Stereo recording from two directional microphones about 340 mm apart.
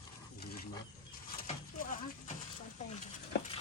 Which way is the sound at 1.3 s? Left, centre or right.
Left.